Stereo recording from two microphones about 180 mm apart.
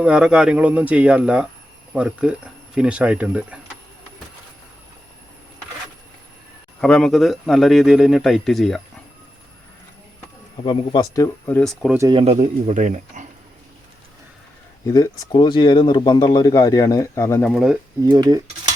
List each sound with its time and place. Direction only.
0.0 s a man's voice: 5° right (ahead or behind)
6.8 s a man's voice: 5° left (ahead or behind)
10.7 s speech: 20° left (ahead or behind); by 11.9 s centre (ahead or behind)
12.1 s speech: 35° right (ahead or behind)
14.8 s speech: 20° left (ahead or behind)
17.5 s a man's voice: centre (ahead or behind)
18.0 s speech: 25° right (ahead or behind)